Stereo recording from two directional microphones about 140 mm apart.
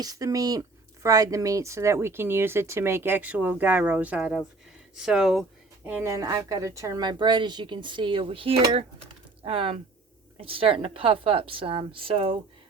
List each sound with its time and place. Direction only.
0.0 s speech: 25° right (ahead or behind); by 5.5 s centre (ahead or behind)
5.8 s a woman's voice: 15° right (ahead or behind); by 12.4 s 40° right (ahead or behind)